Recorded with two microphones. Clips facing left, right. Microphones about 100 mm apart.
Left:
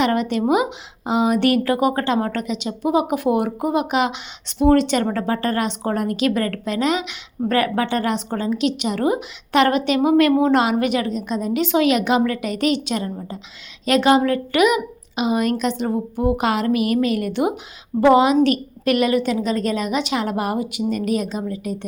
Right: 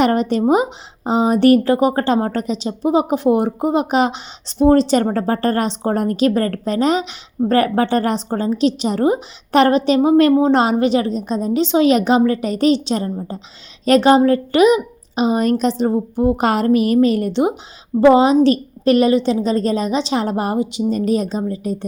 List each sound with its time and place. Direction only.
0.0 s a woman's voice: 35° right (ahead or behind)